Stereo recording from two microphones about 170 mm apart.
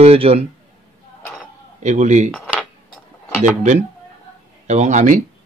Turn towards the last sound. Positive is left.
turn(degrees=-45)  # may be behind; listen again after turning